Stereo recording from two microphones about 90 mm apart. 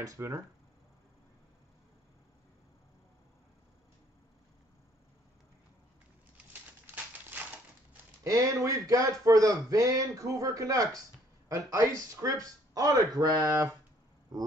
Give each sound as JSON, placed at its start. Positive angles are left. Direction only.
{"t": 0.0, "sound": "speech", "side_deg": -35}
{"t": 8.2, "sound": "speech", "side_deg": -40}